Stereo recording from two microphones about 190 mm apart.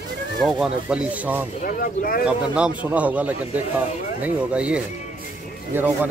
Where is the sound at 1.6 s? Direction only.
50° left (ahead or behind).